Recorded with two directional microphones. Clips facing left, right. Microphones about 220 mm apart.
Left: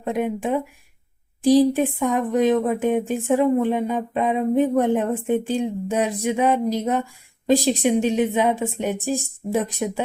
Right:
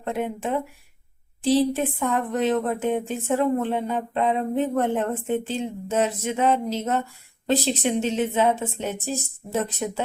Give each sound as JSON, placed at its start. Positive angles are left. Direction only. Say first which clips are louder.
{"t": 0.0, "sound": "speech", "louder": "left 4 dB", "side_deg": 15}